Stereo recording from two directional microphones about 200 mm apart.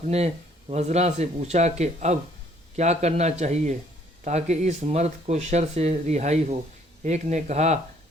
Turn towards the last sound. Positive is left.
turn(degrees=-35)  # may be behind; listen again after turning